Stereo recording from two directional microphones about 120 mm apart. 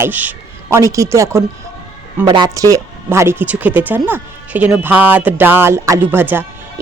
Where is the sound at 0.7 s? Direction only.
25° right (ahead or behind).